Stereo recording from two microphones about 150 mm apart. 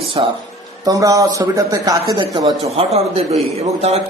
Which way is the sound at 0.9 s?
20° right (ahead or behind).